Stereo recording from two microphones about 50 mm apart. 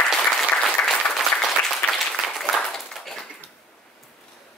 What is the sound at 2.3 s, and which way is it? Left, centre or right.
Clapping, centre.